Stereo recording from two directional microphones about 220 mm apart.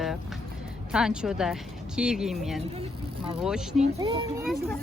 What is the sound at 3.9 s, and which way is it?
Speech, 20° right (ahead or behind).